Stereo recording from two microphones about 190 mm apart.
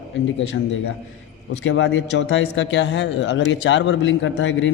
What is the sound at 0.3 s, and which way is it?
Speech, 75° left (ahead or behind).